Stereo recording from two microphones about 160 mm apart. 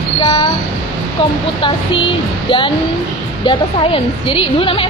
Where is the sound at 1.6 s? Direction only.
30° left (ahead or behind).